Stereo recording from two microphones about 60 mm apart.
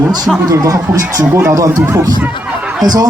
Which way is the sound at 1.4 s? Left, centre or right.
Right.